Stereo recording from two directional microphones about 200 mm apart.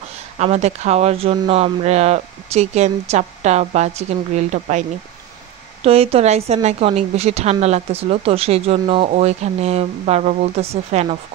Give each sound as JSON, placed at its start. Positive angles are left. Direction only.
{"t": 0.4, "sound": "a woman's voice", "side_deg": -35}